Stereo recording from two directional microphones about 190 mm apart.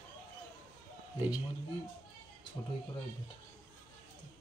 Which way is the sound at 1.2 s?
5° right (ahead or behind).